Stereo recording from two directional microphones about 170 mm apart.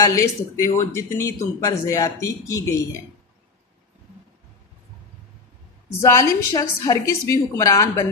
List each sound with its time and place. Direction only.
0.2 s a woman's voice: 20° left (ahead or behind)
6.0 s a woman's voice: 20° left (ahead or behind)